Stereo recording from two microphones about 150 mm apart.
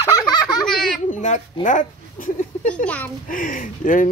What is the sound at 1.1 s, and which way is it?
Speech, 55° left (ahead or behind).